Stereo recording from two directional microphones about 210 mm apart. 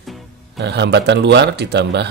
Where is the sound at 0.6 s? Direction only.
55° right (ahead or behind).